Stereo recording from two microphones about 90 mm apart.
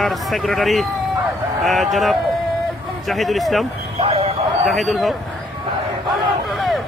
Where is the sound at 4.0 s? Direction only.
90° right.